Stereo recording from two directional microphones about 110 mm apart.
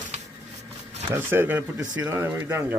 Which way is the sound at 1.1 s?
20° right (ahead or behind).